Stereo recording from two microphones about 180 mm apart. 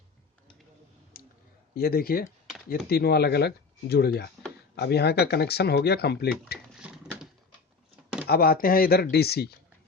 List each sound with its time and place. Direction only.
1.2 s clicking: 55° left (ahead or behind)
1.7 s speech: 55° left (ahead or behind)
6.7 s typewriter: 5° right (ahead or behind)
8.3 s speech: 55° left (ahead or behind)